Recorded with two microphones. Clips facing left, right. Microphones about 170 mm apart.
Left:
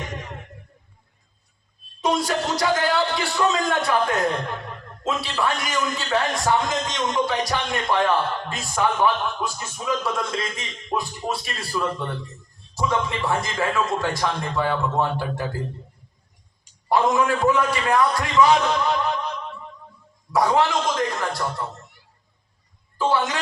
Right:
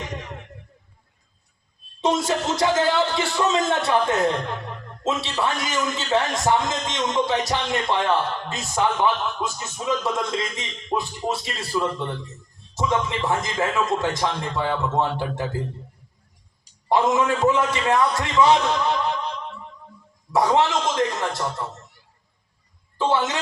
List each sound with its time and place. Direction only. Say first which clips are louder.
2.0 s a man's voice: right 1 dB; 25° right (ahead or behind)
16.9 s a man's voice: even; 20° right (ahead or behind)
20.3 s a man's voice: even; 25° right (ahead or behind)
23.0 s a man's voice: even; 20° right (ahead or behind)